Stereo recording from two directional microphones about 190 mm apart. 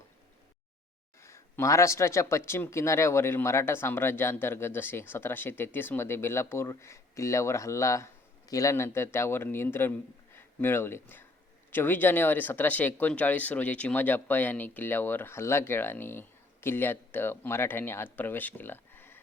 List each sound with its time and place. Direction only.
1.2 s speech: 15° left (ahead or behind)
10.3 s a sound: 10° left (ahead or behind)
11.7 s speech: 10° left (ahead or behind)